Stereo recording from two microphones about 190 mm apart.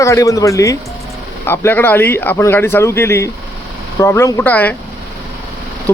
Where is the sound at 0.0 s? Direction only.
15° left (ahead or behind).